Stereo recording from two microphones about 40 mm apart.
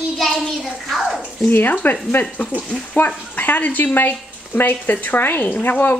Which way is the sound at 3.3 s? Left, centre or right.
Left.